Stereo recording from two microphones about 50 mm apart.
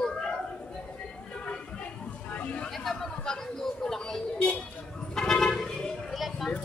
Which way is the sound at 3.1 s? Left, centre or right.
Centre.